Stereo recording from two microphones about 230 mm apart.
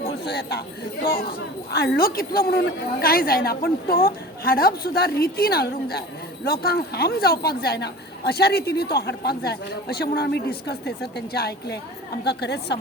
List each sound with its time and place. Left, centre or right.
0.3 s a woman's voice: left